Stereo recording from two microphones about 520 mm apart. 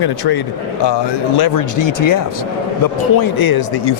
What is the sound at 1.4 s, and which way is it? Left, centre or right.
A man's voice, left.